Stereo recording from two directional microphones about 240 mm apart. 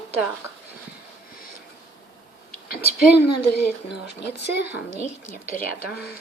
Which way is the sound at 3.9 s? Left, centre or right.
Left.